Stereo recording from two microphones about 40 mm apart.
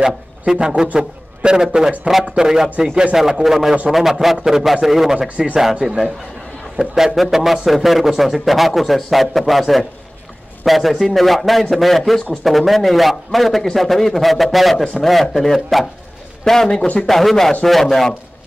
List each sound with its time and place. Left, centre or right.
0.0 s a man's voice: centre
3.2 s a man's voice: centre
7.1 s a man's voice: centre